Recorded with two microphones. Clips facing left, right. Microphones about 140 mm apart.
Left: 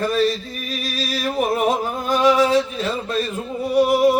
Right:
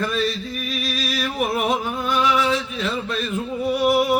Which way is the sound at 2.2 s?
35° left (ahead or behind).